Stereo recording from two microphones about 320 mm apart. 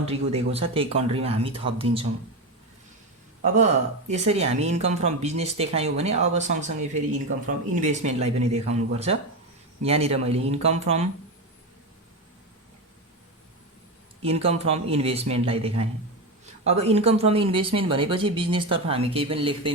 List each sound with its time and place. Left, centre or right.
0.0 s speech: centre
4.1 s speech: centre
14.2 s speech: centre